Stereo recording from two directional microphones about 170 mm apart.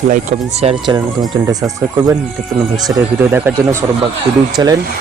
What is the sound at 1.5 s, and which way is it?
Speech, 20° right (ahead or behind).